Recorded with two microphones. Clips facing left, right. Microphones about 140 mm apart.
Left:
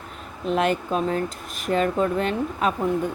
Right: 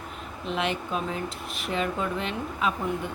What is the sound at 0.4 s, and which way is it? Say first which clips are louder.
Speech: left 7 dB; 45° left (ahead or behind).